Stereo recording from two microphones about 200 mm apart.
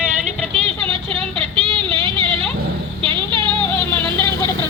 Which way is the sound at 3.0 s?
25° right (ahead or behind).